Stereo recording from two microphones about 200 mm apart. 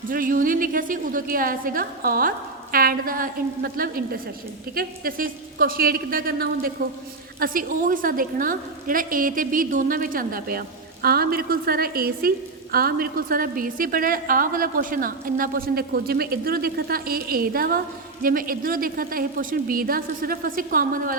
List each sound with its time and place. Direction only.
0.1 s a woman's voice: 45° right (ahead or behind)